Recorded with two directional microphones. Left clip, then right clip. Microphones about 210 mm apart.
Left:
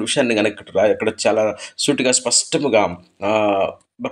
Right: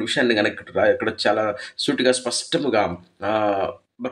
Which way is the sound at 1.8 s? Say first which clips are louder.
Left 2 dB; 10° right (ahead or behind).